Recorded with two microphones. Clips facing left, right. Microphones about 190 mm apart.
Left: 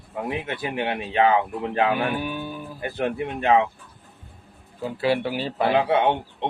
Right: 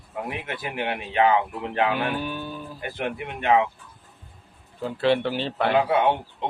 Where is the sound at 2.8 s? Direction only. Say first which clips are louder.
Left 5 dB; 30° left (ahead or behind).